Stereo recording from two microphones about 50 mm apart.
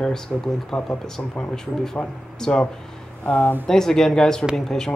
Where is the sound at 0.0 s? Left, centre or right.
Centre.